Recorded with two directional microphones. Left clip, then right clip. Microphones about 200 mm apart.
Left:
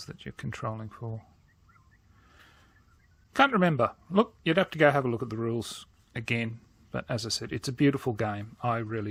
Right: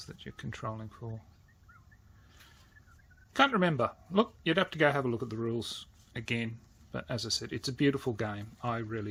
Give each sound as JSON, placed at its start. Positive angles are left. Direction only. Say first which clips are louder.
{"t": 0.0, "sound": "speech", "louder": "left 4 dB", "side_deg": 35}
{"t": 3.3, "sound": "speech", "louder": "left 3 dB", "side_deg": 35}